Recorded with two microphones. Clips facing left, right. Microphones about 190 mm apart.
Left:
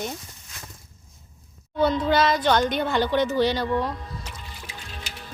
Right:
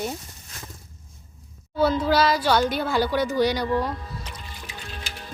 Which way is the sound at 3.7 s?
Centre (ahead or behind).